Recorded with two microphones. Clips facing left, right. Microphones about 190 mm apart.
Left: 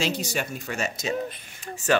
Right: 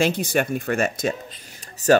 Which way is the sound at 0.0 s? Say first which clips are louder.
Right 7 dB; 55° right (ahead or behind).